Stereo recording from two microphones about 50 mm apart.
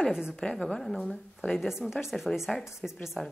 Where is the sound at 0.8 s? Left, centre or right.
Centre.